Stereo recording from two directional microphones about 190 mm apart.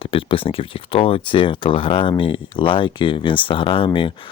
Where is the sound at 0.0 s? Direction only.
30° left (ahead or behind).